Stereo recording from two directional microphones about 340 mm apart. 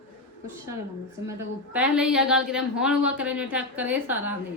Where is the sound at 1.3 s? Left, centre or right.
Centre.